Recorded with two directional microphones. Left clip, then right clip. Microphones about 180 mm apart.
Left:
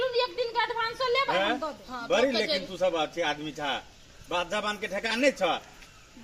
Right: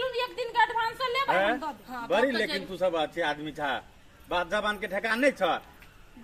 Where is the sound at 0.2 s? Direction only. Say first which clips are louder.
Right 1 dB; 30° right (ahead or behind).